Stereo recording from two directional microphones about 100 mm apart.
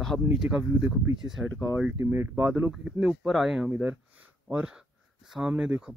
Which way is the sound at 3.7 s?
15° right (ahead or behind).